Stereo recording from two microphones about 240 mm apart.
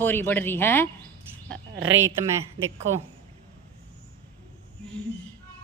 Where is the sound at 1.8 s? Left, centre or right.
Right.